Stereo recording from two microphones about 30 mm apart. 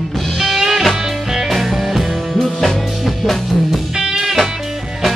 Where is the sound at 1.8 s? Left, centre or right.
Centre.